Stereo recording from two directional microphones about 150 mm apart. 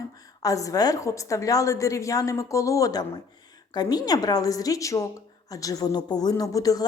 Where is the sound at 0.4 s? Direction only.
20° left (ahead or behind).